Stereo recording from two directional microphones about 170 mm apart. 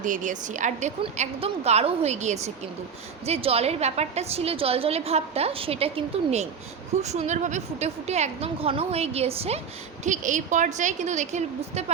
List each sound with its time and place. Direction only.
0.0 s a woman's voice: 50° right (ahead or behind); by 5.9 s 35° right (ahead or behind)
7.0 s a woman's voice: 40° right (ahead or behind)
10.0 s a woman's voice: 45° right (ahead or behind)